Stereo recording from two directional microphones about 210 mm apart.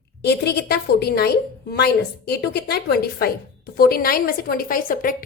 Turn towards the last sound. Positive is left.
turn(degrees=40)  # may be behind; listen again after turning